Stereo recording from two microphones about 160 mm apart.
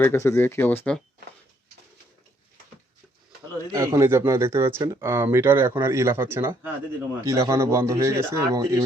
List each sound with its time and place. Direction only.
0.0 s speech: 15° left (ahead or behind)
3.7 s speech: 20° right (ahead or behind)